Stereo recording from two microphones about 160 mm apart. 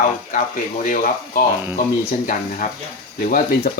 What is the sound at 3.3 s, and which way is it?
Speech, 70° left (ahead or behind).